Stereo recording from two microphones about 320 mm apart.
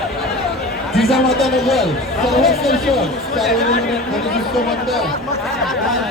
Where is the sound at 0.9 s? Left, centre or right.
Centre.